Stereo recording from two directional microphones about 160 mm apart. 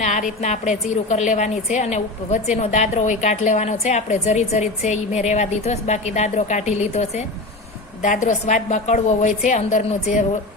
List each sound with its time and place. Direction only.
0.0 s a woman's voice: 50° left (ahead or behind)